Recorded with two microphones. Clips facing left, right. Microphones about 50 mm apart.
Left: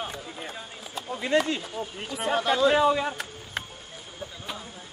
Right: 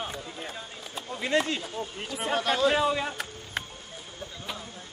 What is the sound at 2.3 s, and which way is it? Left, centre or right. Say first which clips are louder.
Speech: left 2 dB; left.